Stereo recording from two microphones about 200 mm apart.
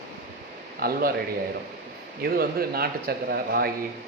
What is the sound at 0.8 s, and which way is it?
Speech, 50° right (ahead or behind).